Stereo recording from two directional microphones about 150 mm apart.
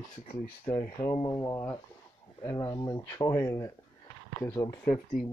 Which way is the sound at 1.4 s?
15° left (ahead or behind).